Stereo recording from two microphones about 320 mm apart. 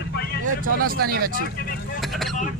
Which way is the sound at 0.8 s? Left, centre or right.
Right.